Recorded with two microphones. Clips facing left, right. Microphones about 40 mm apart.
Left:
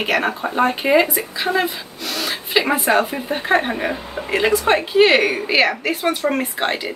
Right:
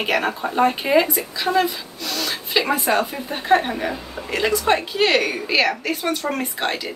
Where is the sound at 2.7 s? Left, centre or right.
Centre.